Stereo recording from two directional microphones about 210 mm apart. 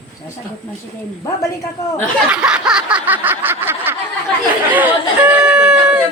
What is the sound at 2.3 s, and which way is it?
Snicker, 5° right (ahead or behind).